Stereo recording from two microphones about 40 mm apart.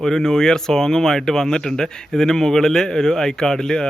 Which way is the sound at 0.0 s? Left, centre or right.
Centre.